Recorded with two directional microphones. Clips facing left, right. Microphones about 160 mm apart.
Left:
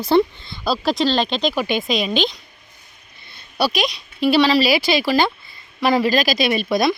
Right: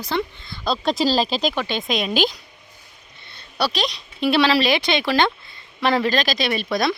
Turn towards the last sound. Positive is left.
turn(degrees=10)  # may be behind; listen again after turning